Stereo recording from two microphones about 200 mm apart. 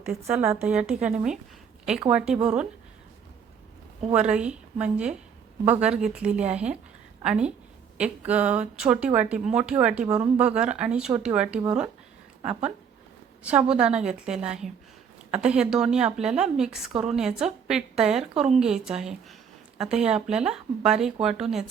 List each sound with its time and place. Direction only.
0.0 s a woman's voice: 5° right (ahead or behind)
4.1 s a woman's voice: 5° right (ahead or behind)
12.5 s speech: 30° right (ahead or behind)
13.4 s a woman's voice: 5° right (ahead or behind)